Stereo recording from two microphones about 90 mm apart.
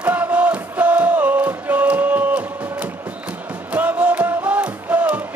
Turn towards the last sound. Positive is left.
turn(degrees=-15)  # may be behind; listen again after turning